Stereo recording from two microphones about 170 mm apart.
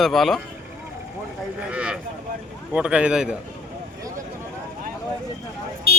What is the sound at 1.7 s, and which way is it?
A man's voice, 5° right (ahead or behind).